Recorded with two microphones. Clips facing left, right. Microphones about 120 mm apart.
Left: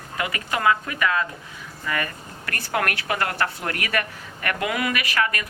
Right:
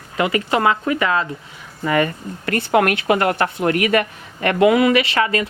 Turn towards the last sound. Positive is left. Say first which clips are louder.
# right 7 dB
turn(degrees=-25)  # may be behind; listen again after turning